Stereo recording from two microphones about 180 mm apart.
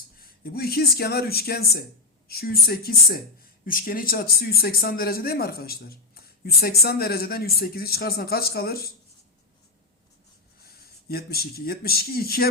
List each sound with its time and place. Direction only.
0.2 s speech: 55° left (ahead or behind)
10.6 s speech: 60° left (ahead or behind)